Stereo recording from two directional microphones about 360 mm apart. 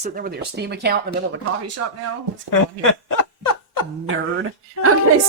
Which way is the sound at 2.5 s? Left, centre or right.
Left.